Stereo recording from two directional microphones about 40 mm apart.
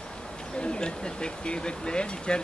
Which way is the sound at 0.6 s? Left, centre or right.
Left.